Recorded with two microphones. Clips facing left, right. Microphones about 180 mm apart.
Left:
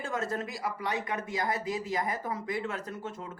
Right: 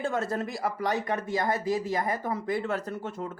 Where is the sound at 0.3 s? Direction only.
50° right (ahead or behind).